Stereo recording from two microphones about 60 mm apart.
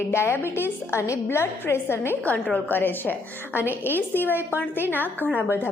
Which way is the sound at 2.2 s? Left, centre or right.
Left.